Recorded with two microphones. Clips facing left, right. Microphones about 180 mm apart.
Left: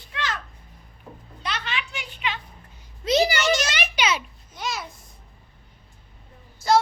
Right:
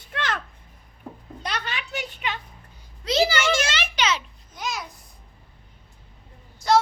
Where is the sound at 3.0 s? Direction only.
20° left (ahead or behind).